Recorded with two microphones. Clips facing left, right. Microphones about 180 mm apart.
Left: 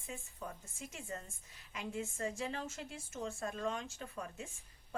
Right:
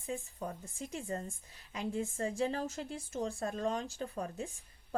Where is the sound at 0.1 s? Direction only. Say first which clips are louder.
Right 7 dB; 35° right (ahead or behind).